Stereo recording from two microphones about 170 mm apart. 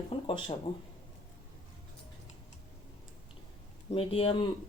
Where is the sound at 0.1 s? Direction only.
30° left (ahead or behind).